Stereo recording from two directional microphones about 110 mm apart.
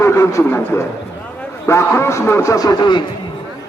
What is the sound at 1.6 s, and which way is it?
Speech, 25° left (ahead or behind).